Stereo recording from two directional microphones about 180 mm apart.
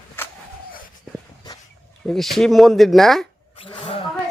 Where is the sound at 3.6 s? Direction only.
30° left (ahead or behind).